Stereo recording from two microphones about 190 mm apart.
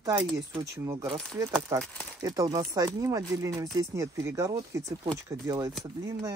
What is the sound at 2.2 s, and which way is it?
Speech, 20° right (ahead or behind).